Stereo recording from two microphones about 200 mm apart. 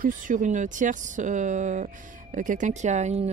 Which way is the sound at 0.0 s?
40° right (ahead or behind).